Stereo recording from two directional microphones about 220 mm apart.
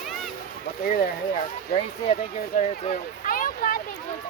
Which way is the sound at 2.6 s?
40° left (ahead or behind).